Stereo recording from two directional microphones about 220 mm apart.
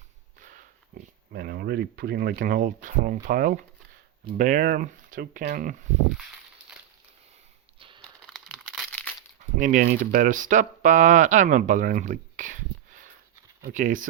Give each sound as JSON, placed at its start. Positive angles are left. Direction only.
{"t": 0.3, "sound": "speech", "side_deg": -35}
{"t": 7.8, "sound": "a sound", "side_deg": -25}
{"t": 8.3, "sound": "crumpling", "side_deg": 0}
{"t": 9.6, "sound": "speech", "side_deg": -35}